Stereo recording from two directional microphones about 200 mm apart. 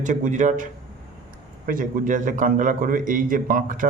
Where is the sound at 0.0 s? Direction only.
40° right (ahead or behind).